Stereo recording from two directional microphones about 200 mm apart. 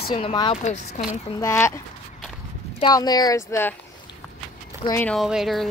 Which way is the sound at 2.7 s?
20° left (ahead or behind).